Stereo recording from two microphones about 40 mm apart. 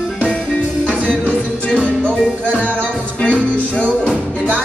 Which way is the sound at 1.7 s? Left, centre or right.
Left.